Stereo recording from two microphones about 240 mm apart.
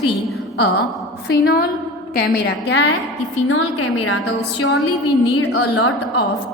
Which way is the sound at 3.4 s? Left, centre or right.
Left.